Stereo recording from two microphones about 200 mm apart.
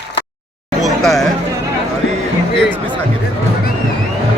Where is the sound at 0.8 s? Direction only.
Centre (ahead or behind).